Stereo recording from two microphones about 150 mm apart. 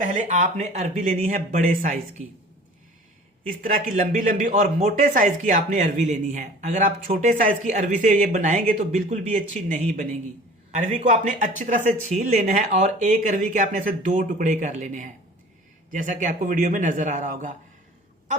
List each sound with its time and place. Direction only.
0.0 s speech: 55° right (ahead or behind)
3.6 s speech: 60° right (ahead or behind)